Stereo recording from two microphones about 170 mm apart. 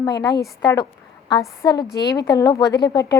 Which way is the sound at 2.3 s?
20° left (ahead or behind).